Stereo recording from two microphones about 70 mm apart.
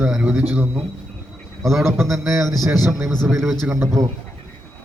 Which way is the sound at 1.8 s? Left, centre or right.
Right.